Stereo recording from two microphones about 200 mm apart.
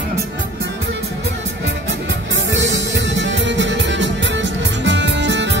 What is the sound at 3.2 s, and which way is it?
Music, 60° right (ahead or behind).